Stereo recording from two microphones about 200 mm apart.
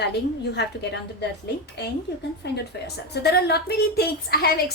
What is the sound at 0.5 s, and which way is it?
A woman's voice, 60° left (ahead or behind).